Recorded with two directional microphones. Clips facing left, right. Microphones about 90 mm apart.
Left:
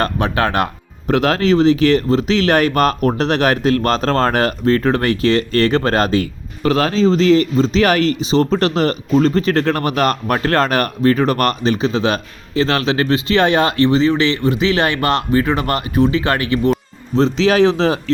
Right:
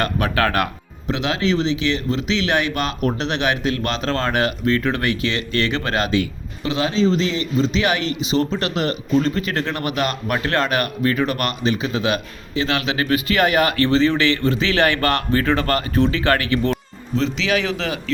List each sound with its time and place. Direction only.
0.0 s speech: 25° left (ahead or behind)
1.0 s speech: 50° left (ahead or behind); by 16.7 s 20° left (ahead or behind)
17.2 s speech: 35° left (ahead or behind)